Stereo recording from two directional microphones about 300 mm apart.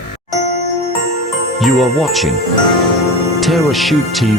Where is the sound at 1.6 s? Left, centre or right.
Centre.